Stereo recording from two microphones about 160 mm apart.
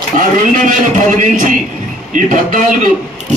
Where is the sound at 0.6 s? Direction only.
55° right (ahead or behind).